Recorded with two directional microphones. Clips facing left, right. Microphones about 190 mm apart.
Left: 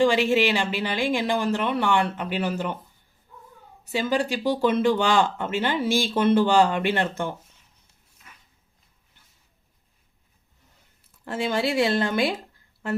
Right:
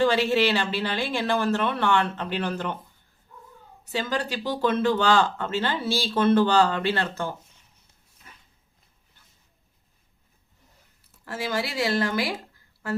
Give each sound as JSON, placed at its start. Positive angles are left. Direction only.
{"t": 0.0, "sound": "speech", "side_deg": 15}
{"t": 3.9, "sound": "speech", "side_deg": 10}
{"t": 11.3, "sound": "a woman's voice", "side_deg": 25}